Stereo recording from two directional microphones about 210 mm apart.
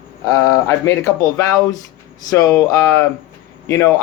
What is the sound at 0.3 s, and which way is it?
Speech, 15° left (ahead or behind).